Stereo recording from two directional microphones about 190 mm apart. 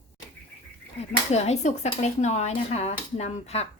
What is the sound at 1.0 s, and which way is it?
A woman's voice, 35° left (ahead or behind).